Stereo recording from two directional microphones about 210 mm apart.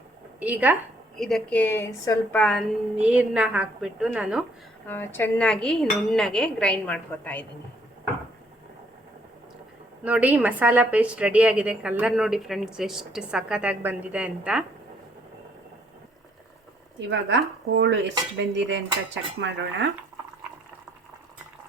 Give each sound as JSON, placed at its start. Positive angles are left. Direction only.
{"t": 0.3, "sound": "a woman's voice", "side_deg": -10}
{"t": 4.9, "sound": "a woman's voice", "side_deg": 10}
{"t": 10.0, "sound": "a woman's voice", "side_deg": -5}
{"t": 17.1, "sound": "dishes", "side_deg": -55}